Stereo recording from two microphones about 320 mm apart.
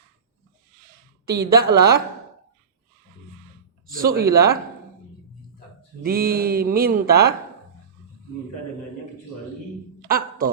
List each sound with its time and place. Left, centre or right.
1.3 s speech: right
3.8 s speech: right
6.0 s speech: right
10.1 s a sound: right